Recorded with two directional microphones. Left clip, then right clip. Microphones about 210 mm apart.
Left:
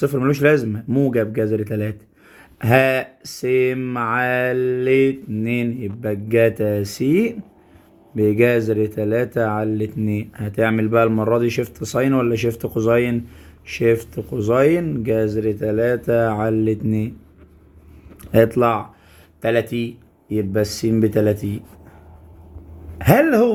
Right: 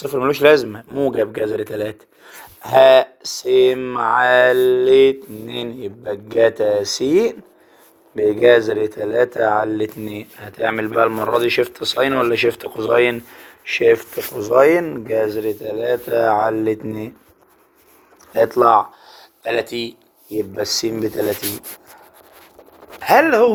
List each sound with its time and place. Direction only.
0.1 s speech: 15° right (ahead or behind)
6.4 s speech: 15° right (ahead or behind)
18.4 s speech: 15° right (ahead or behind)
19.5 s speech: 30° right (ahead or behind)
23.0 s speech: 20° right (ahead or behind)